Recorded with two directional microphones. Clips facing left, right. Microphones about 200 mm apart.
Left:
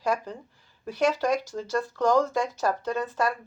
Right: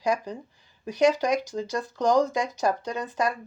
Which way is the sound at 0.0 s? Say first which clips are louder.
Right 1 dB; 15° right (ahead or behind).